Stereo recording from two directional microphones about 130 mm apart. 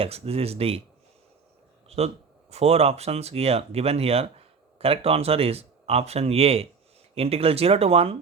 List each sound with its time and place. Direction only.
0.0 s speech: 50° right (ahead or behind)
1.9 s speech: 55° right (ahead or behind)